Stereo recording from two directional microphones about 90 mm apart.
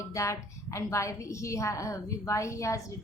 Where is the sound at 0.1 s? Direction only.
35° left (ahead or behind).